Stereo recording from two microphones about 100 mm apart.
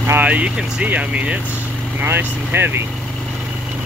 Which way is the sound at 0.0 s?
20° right (ahead or behind).